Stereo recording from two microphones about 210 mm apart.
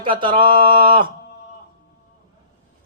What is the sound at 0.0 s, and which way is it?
A man's voice, 25° right (ahead or behind).